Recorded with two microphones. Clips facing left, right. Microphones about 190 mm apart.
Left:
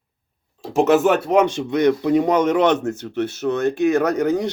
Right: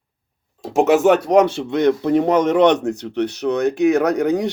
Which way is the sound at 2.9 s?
70° right (ahead or behind).